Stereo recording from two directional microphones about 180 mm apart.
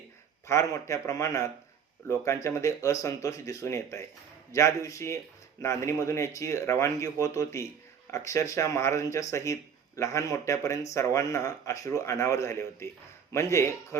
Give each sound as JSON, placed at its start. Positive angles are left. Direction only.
{"t": 0.4, "sound": "speech", "side_deg": 15}